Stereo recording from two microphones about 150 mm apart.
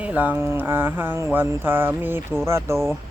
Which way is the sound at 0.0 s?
10° right (ahead or behind).